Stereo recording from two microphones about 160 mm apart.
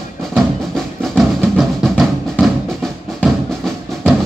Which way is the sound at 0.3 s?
Centre (ahead or behind).